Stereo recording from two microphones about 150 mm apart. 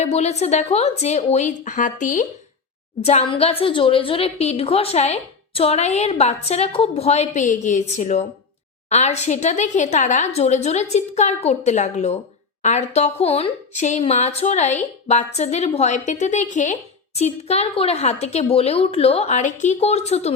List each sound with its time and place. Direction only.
0.0 s a woman's voice: 45° left (ahead or behind)
3.0 s a woman's voice: 45° left (ahead or behind)